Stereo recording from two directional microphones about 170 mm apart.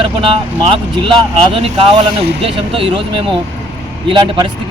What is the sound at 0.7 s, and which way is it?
A man's voice, 30° right (ahead or behind).